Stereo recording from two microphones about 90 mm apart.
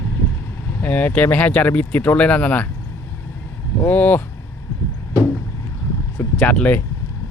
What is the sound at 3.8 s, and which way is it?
Speech, 20° left (ahead or behind).